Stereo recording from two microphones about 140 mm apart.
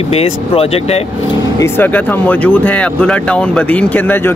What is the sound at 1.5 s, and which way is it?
Speech, 20° left (ahead or behind).